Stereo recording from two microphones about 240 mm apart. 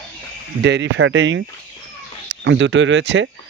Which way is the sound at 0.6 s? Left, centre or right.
Right.